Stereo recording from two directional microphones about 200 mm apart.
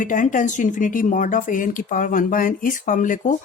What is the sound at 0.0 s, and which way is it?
Speech, 40° left (ahead or behind).